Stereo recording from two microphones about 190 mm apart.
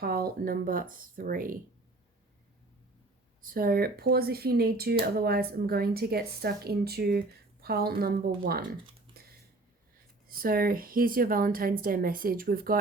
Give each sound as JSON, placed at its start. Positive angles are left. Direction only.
{"t": 0.0, "sound": "speech", "side_deg": -50}
{"t": 3.4, "sound": "speech", "side_deg": -50}
{"t": 9.2, "sound": "a sound", "side_deg": -50}
{"t": 10.2, "sound": "speech", "side_deg": -50}